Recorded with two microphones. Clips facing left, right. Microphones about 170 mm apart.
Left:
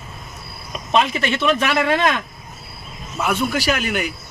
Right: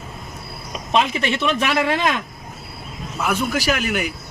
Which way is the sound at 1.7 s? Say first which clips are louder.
Left 1 dB; 5° right (ahead or behind).